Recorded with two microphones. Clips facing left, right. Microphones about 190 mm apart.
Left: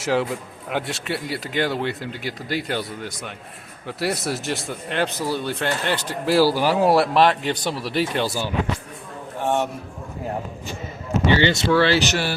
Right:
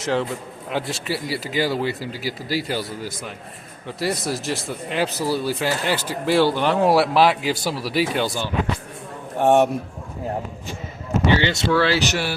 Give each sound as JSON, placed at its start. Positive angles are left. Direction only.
{"t": 0.0, "sound": "speech", "side_deg": 5}
{"t": 9.4, "sound": "speech", "side_deg": -60}
{"t": 11.4, "sound": "speech", "side_deg": -5}